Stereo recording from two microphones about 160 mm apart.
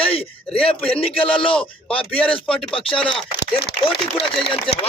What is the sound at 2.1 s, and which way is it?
Speech, 10° left (ahead or behind).